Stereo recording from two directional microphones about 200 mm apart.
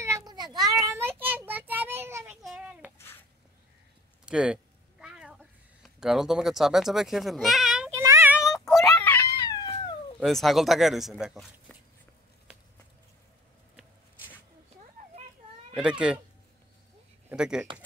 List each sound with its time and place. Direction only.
0.0 s cat: 15° right (ahead or behind)
0.6 s a sound: centre (ahead or behind)
0.8 s child singing: 10° right (ahead or behind)
2.4 s a sound: 5° right (ahead or behind)
4.3 s speech: 5° right (ahead or behind)
5.0 s cat: 5° right (ahead or behind)
7.9 s a sound: 15° right (ahead or behind); by 9.4 s 10° left (ahead or behind)
9.4 s cat: 20° left (ahead or behind)
10.2 s speech: centre (ahead or behind)
15.7 s speech: 5° right (ahead or behind)
17.3 s speech: 5° right (ahead or behind)